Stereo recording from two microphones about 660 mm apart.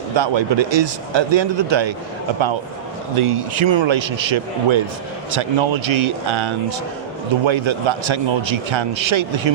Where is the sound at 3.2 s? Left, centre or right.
Right.